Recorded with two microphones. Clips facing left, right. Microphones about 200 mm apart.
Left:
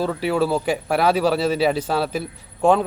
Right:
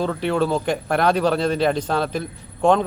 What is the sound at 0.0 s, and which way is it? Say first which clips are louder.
Speech: even; 5° left (ahead or behind).